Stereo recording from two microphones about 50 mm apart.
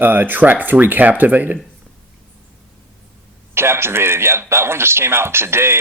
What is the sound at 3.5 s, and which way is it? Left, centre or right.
Speech, right.